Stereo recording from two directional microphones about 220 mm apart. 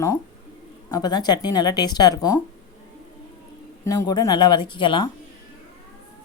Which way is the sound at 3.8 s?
15° left (ahead or behind).